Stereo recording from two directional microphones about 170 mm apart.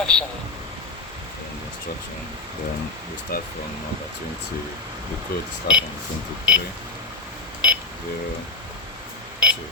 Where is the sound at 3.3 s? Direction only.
65° left (ahead or behind).